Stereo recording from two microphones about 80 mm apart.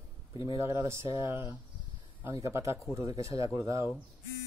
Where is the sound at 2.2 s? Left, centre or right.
Right.